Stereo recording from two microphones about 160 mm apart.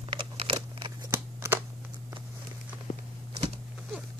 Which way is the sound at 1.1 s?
15° right (ahead or behind).